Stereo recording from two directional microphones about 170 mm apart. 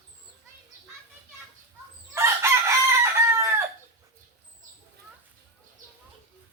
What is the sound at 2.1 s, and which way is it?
Chicken, 15° right (ahead or behind).